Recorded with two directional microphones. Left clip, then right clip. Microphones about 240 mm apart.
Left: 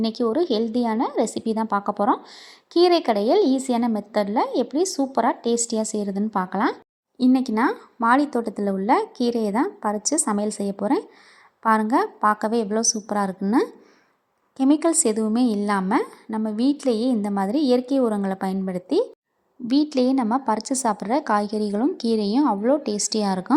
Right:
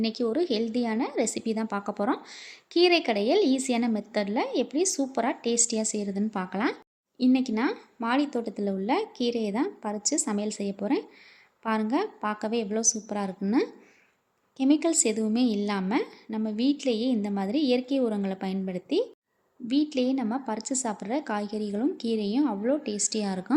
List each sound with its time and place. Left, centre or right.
0.0 s a woman's voice: centre